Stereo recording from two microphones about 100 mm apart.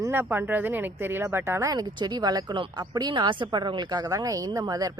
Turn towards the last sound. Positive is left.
turn(degrees=-35)  # may be behind; listen again after turning